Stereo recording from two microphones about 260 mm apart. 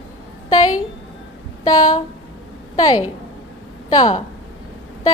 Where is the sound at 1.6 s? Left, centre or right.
Centre.